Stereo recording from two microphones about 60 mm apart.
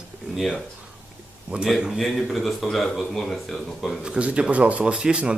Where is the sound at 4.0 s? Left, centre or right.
Centre.